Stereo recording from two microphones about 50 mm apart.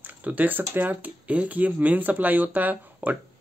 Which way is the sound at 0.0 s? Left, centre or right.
Right.